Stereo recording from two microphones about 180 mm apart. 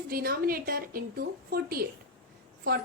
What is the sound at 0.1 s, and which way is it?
A woman's voice, 55° right (ahead or behind).